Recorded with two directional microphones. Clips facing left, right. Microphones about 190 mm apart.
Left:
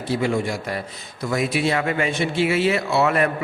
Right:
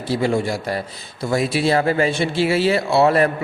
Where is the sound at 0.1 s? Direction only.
35° right (ahead or behind).